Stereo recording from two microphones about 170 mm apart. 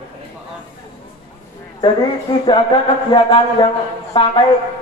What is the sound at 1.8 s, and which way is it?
Speech, 25° left (ahead or behind).